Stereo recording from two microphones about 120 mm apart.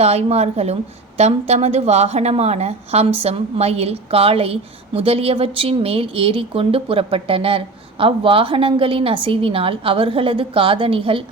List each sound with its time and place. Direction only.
0.0 s a woman's voice: 60° right (ahead or behind)